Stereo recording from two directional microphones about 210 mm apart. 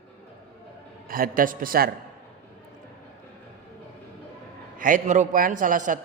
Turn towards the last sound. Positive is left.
turn(degrees=-40)  # may be behind; listen again after turning